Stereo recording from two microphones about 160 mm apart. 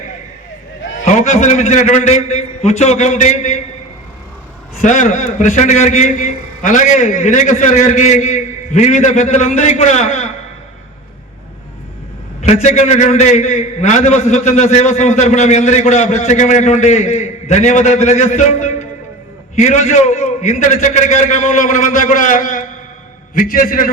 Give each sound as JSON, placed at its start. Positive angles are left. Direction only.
{"t": 1.0, "sound": "a man's voice", "side_deg": 50}
{"t": 4.8, "sound": "a man's voice", "side_deg": 50}
{"t": 12.4, "sound": "a man's voice", "side_deg": 45}